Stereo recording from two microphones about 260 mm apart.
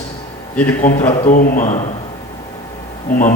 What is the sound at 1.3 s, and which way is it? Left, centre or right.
Speech, left.